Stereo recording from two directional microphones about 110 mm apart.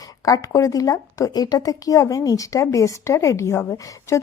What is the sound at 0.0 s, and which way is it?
A woman's voice, 35° left (ahead or behind).